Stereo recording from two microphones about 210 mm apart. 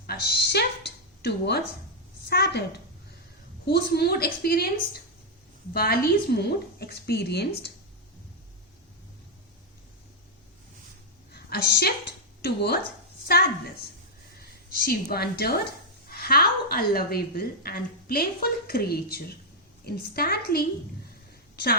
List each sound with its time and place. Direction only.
0.1 s a woman's voice: 50° left (ahead or behind)
3.7 s a woman's voice: 50° left (ahead or behind)
11.3 s a woman's voice: 45° left (ahead or behind)
14.7 s a woman's voice: 45° left (ahead or behind)
21.5 s a sound: 45° left (ahead or behind)